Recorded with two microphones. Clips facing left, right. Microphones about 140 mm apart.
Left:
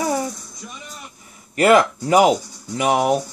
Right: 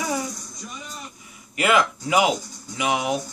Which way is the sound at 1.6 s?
45° left (ahead or behind).